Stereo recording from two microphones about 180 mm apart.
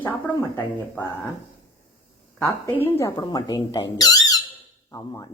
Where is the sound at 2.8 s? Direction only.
15° left (ahead or behind).